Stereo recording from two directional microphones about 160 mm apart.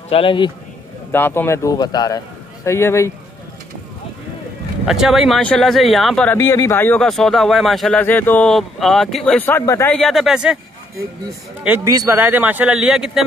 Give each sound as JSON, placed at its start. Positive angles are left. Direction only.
{"t": 0.1, "sound": "a man's voice", "side_deg": 35}
{"t": 1.1, "sound": "a man's voice", "side_deg": 15}
{"t": 4.8, "sound": "speech", "side_deg": -5}
{"t": 6.3, "sound": "a man's voice", "side_deg": 20}
{"t": 7.1, "sound": "speech", "side_deg": 0}
{"t": 9.9, "sound": "speech", "side_deg": 0}
{"t": 11.6, "sound": "a man's voice", "side_deg": -10}
{"t": 11.9, "sound": "speech", "side_deg": -20}
{"t": 12.2, "sound": "a man's voice", "side_deg": -10}